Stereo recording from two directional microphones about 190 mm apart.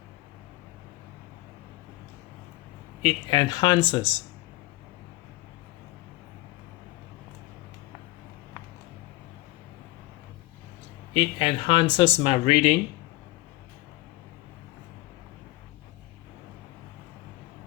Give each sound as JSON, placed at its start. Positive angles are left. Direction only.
{"t": 3.0, "sound": "speech", "side_deg": 25}
{"t": 11.1, "sound": "speech", "side_deg": 25}